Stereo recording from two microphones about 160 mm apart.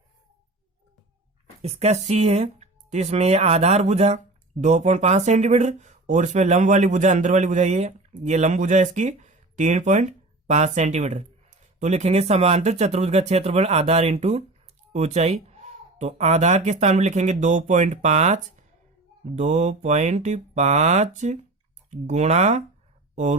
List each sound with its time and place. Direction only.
1.6 s speech: 40° right (ahead or behind)